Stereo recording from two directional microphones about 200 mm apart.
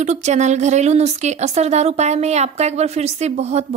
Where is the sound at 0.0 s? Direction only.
35° right (ahead or behind).